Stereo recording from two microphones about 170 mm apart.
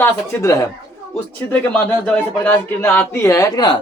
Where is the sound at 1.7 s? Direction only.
5° left (ahead or behind).